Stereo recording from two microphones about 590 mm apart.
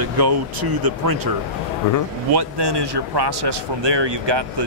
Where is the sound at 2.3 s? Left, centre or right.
Right.